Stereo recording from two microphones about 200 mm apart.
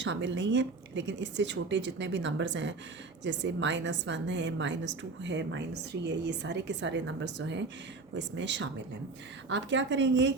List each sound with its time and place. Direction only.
0.0 s speech: 65° right (ahead or behind)